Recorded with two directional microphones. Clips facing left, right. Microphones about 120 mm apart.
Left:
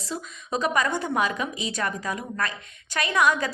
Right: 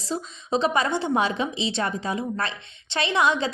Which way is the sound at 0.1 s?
30° right (ahead or behind).